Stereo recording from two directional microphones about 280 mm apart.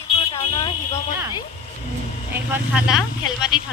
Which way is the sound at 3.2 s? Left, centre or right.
Centre.